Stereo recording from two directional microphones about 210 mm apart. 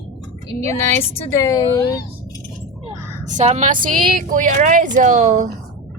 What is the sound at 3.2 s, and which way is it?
A woman's voice, 35° right (ahead or behind).